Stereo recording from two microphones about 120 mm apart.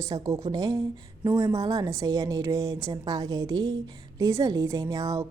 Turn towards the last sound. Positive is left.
turn(degrees=-30)  # may be behind; listen again after turning